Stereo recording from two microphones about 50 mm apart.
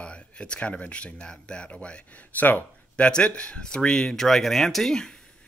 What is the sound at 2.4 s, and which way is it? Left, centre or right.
Speech, left.